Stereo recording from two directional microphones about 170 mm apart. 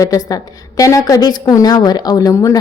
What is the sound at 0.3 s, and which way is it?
A woman's voice, 20° left (ahead or behind).